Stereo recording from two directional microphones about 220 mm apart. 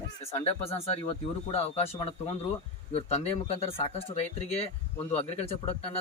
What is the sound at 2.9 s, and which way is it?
Speech, 25° left (ahead or behind).